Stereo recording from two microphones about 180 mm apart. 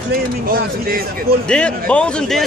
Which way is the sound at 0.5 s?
55° right (ahead or behind).